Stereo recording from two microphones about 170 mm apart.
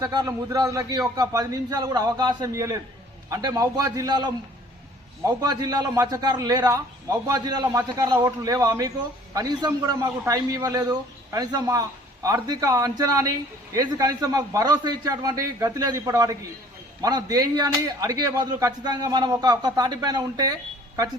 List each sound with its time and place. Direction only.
0.0 s a man's voice: 20° right (ahead or behind)
5.3 s a man's voice: 25° right (ahead or behind)